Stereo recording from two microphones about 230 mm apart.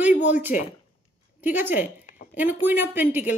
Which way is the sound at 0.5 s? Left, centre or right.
Left.